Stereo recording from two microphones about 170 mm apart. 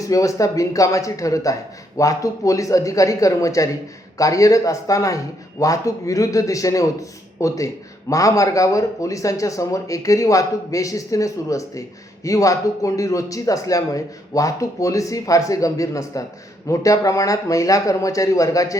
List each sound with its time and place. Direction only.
0.0 s speech: 20° left (ahead or behind)